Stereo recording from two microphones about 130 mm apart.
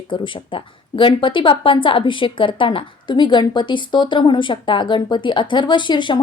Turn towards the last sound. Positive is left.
turn(degrees=35)  # may be behind; listen again after turning